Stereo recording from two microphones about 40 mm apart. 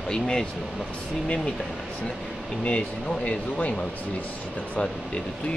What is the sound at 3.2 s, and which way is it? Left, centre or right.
Speech, left.